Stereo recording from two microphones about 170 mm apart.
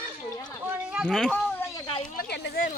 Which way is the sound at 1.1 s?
5° left (ahead or behind).